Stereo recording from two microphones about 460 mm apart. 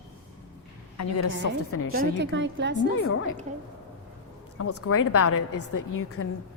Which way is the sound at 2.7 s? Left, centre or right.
Left.